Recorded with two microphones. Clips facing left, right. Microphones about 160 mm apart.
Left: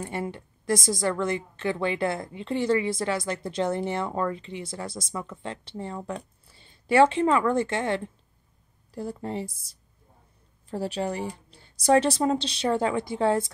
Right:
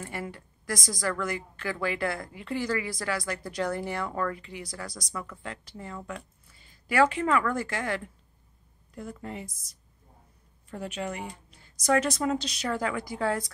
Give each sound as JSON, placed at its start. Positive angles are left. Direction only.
{"t": 0.0, "sound": "a woman's voice", "side_deg": 25}